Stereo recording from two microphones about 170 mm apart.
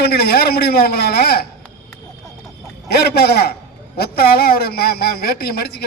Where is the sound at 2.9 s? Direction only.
70° left (ahead or behind).